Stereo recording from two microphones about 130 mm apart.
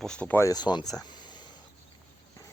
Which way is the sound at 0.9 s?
35° left (ahead or behind).